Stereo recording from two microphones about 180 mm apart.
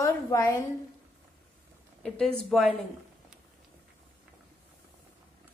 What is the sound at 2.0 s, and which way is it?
Speech, 5° left (ahead or behind).